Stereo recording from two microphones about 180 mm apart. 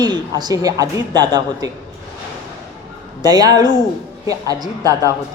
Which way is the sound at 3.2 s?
20° right (ahead or behind).